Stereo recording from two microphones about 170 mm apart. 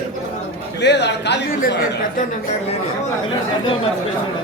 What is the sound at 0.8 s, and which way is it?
Speech, 90° left.